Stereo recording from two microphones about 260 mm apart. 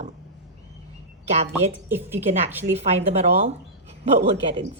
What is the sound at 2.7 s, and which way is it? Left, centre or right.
Speech, right.